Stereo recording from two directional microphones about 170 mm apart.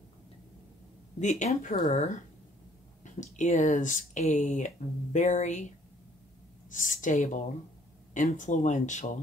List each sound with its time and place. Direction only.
1.2 s speech: 45° left (ahead or behind)
6.7 s speech: 50° left (ahead or behind)